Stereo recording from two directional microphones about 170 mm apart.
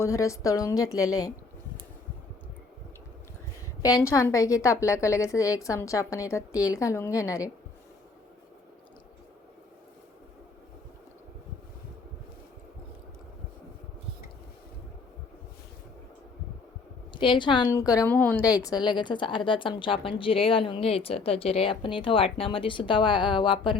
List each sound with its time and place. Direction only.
0.0 s a woman's voice: 20° left (ahead or behind)
3.8 s a woman's voice: 20° left (ahead or behind)
17.2 s a woman's voice: 30° left (ahead or behind); by 18.4 s 10° left (ahead or behind)
18.6 s a woman's voice: 25° left (ahead or behind)